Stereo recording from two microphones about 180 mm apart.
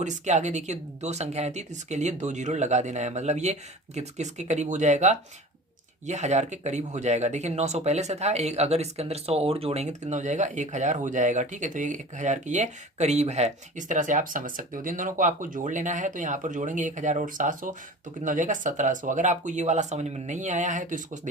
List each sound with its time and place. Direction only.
0.0 s speech: 40° right (ahead or behind)